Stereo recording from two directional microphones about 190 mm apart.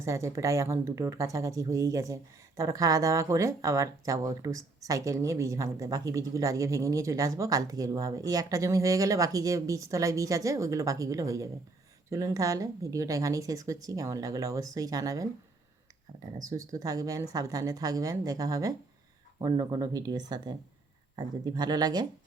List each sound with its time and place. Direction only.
0.0 s speech: 15° right (ahead or behind)
16.4 s speech: 15° right (ahead or behind)